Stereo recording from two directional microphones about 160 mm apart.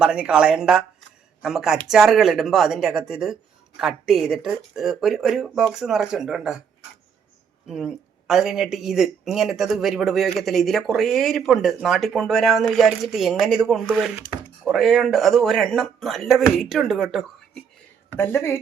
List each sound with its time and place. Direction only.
0.0 s speech: 5° right (ahead or behind)
7.7 s speech: 5° right (ahead or behind)
18.2 s a woman's voice: 15° left (ahead or behind)